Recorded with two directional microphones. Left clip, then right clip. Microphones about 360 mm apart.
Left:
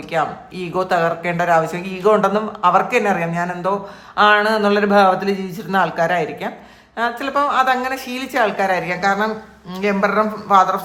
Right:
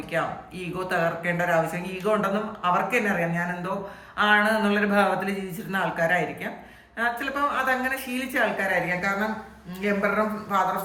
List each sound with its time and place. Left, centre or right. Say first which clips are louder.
0.1 s speech: left 7 dB; centre